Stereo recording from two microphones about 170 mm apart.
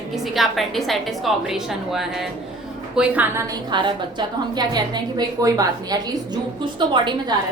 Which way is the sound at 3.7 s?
25° right (ahead or behind).